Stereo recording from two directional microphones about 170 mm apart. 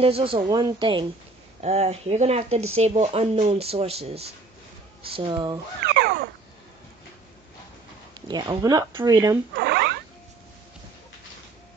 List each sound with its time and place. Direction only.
0.0 s speech: 35° right (ahead or behind)
1.6 s speech: 40° right (ahead or behind)
5.9 s cat: 70° right (ahead or behind)
8.3 s speech: 25° right (ahead or behind)
9.6 s rodents: 75° right (ahead or behind)